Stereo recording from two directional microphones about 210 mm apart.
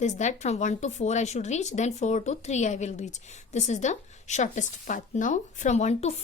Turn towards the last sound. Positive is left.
turn(degrees=30)  # may be behind; listen again after turning